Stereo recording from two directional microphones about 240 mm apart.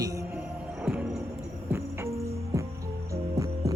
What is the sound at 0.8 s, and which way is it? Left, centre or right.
Music, centre.